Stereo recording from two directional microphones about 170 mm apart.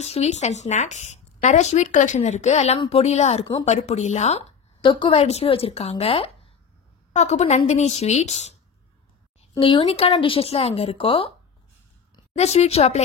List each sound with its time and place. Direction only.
0.0 s speech: 40° left (ahead or behind)
4.8 s speech: 30° left (ahead or behind)
9.6 s speech: 30° left (ahead or behind)
12.4 s speech: 40° left (ahead or behind)